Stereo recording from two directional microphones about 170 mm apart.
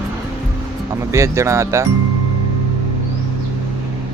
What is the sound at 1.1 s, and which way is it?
Speech, 15° right (ahead or behind).